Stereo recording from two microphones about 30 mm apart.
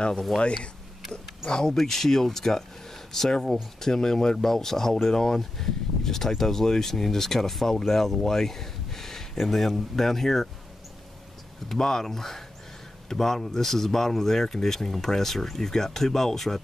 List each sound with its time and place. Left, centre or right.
1.5 s speech: left
11.7 s speech: centre